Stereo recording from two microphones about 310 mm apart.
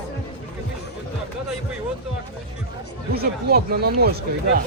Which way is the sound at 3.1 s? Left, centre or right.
Right.